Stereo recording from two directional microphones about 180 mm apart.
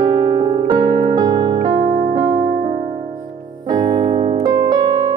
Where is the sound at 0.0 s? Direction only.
25° right (ahead or behind).